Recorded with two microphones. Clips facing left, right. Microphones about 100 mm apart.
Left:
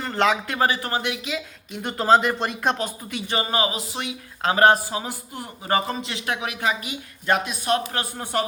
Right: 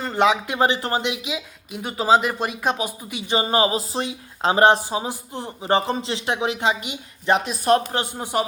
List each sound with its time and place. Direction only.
0.0 s speech: 15° right (ahead or behind)
1.0 s speech: 15° right (ahead or behind)
3.5 s speech: 30° right (ahead or behind)
7.4 s speech: 35° right (ahead or behind)
7.9 s speech: 15° right (ahead or behind)